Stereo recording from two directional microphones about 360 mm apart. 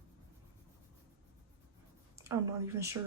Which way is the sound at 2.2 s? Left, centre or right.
Centre.